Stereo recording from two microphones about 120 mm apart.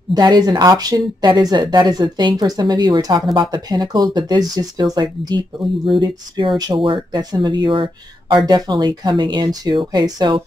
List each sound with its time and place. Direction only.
0.1 s speech: 35° right (ahead or behind)